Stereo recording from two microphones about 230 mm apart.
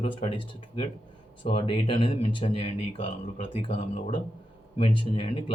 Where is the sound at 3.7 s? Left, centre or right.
Left.